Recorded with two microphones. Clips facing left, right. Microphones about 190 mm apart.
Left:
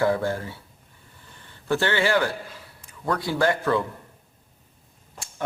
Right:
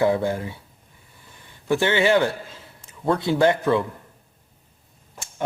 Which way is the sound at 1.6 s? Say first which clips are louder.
Right 3 dB; 15° right (ahead or behind).